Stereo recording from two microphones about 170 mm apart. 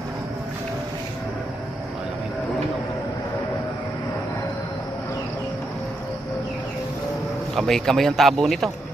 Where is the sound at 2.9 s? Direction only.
15° left (ahead or behind).